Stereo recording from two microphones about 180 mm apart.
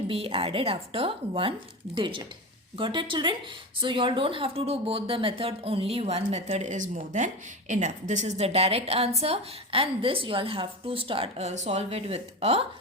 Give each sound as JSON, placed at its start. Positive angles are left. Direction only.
{"t": 0.1, "sound": "speech", "side_deg": -30}